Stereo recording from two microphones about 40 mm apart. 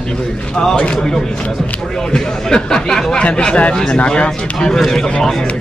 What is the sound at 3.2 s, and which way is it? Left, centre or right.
Speech, left.